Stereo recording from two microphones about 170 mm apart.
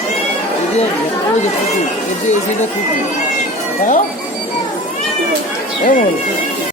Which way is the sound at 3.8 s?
55° left (ahead or behind).